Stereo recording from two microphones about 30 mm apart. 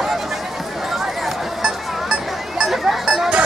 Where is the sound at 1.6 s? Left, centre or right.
Right.